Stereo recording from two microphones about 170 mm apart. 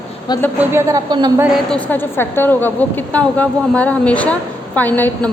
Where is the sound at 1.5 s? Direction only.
10° left (ahead or behind).